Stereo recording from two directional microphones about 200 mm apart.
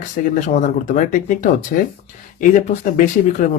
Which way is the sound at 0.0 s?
40° left (ahead or behind).